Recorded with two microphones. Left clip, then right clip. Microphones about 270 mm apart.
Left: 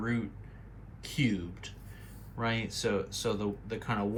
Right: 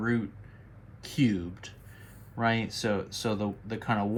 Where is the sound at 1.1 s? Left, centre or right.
Centre.